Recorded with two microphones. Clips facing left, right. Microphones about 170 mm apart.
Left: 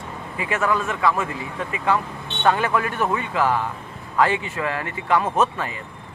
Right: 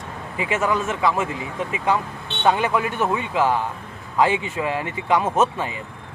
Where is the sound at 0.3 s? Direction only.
20° right (ahead or behind).